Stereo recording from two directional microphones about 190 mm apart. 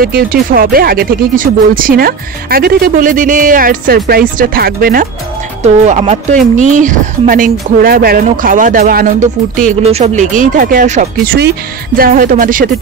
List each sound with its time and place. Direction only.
0.0 s speech: 50° right (ahead or behind)
5.9 s speech: 35° right (ahead or behind)